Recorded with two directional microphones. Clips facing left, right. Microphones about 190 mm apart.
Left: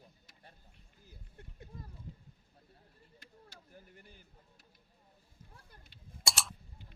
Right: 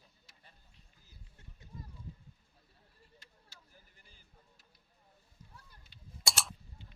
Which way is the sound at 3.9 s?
55° left (ahead or behind).